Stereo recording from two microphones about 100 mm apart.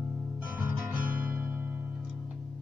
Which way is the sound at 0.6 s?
15° right (ahead or behind).